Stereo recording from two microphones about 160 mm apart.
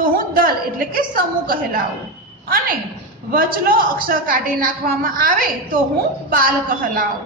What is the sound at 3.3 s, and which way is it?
A woman's voice, 65° right (ahead or behind).